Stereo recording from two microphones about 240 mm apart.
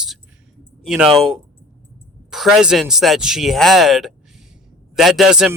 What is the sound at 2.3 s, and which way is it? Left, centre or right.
Speech, centre.